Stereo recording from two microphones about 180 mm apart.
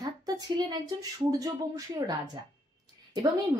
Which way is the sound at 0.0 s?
20° right (ahead or behind).